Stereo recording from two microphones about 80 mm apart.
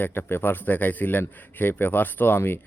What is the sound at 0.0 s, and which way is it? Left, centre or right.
Speech, left.